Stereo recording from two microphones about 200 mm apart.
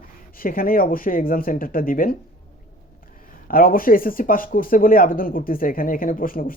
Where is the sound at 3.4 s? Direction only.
45° left (ahead or behind).